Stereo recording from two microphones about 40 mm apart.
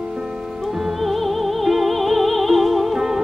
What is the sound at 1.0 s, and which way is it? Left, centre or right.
Music, centre.